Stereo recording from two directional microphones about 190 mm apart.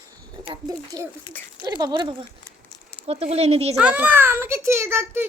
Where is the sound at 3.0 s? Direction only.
35° right (ahead or behind).